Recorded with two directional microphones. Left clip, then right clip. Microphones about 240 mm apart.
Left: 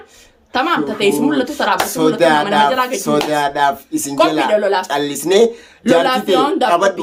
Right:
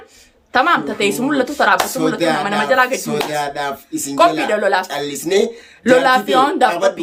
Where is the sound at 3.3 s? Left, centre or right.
Centre.